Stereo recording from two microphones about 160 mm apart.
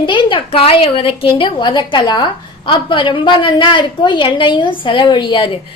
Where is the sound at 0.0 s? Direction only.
30° left (ahead or behind).